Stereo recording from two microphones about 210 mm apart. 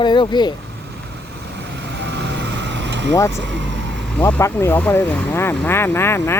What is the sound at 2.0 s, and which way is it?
Vehicle, 55° right (ahead or behind).